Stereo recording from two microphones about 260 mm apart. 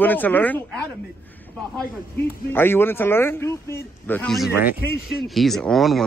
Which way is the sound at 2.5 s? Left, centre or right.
Centre.